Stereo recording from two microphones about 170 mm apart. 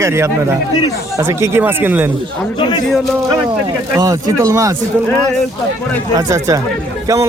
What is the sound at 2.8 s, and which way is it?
Speech, centre (ahead or behind).